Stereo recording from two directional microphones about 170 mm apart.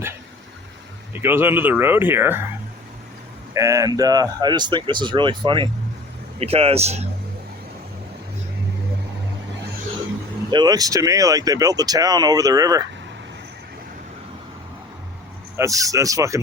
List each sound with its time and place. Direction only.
1.1 s speech: 10° right (ahead or behind)
3.5 s speech: 20° right (ahead or behind); by 7.1 s 40° right (ahead or behind)
10.5 s speech: 25° right (ahead or behind)
15.5 s speech: 20° right (ahead or behind)